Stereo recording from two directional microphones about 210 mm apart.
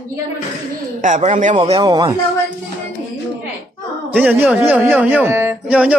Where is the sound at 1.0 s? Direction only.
35° right (ahead or behind).